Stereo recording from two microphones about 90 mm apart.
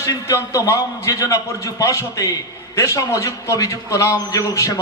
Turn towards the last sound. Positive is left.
turn(degrees=35)  # may be behind; listen again after turning